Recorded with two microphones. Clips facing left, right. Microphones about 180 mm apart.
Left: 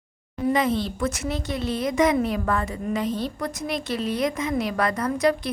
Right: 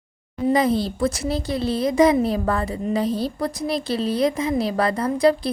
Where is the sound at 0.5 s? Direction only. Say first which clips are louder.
Right 5 dB; 35° right (ahead or behind).